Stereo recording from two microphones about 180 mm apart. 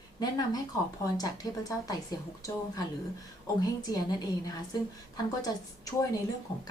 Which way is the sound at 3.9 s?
20° left (ahead or behind).